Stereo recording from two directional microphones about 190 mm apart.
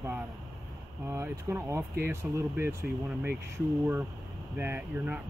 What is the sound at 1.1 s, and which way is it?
Speech, 15° right (ahead or behind).